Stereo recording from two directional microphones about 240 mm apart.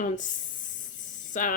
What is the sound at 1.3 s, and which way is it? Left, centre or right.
Speech, left.